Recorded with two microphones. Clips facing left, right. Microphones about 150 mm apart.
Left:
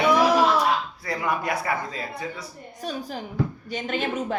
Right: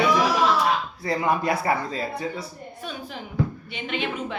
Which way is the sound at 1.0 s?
25° right (ahead or behind).